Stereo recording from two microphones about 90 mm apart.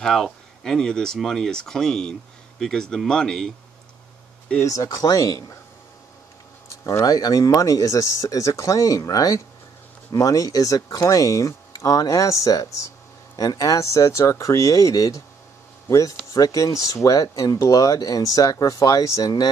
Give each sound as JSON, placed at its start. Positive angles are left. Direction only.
{"t": 0.0, "sound": "speech", "side_deg": 5}
{"t": 4.6, "sound": "speech", "side_deg": 40}
{"t": 6.8, "sound": "speech", "side_deg": 35}